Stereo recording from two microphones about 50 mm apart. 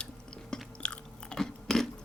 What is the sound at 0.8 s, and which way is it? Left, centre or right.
Chewing, centre.